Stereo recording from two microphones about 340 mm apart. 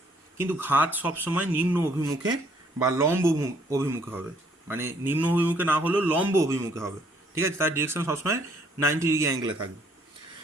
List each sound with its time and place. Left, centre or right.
0.3 s a man's voice: centre